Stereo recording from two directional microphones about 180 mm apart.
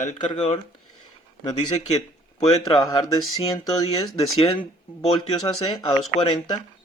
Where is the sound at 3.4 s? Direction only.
35° left (ahead or behind).